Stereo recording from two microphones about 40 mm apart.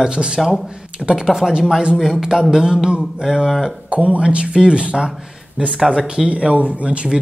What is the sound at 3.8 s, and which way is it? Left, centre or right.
Speech, right.